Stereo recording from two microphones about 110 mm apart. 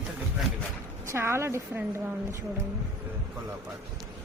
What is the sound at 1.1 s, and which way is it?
Speech, 20° right (ahead or behind).